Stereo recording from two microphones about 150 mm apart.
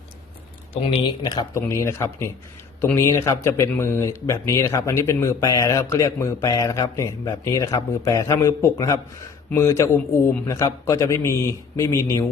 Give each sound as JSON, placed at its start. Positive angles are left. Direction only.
{"t": 0.9, "sound": "speech", "side_deg": 35}
{"t": 1.5, "sound": "speech", "side_deg": 20}